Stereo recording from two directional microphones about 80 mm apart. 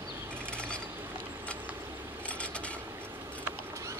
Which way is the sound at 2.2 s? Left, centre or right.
Centre.